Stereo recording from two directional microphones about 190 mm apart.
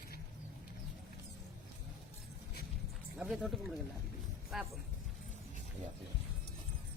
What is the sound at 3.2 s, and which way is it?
Speech, centre (ahead or behind).